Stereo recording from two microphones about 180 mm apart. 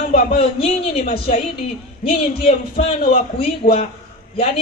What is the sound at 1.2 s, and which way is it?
Speech, 30° left (ahead or behind).